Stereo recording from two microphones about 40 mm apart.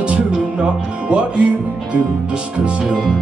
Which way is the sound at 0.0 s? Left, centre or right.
Right.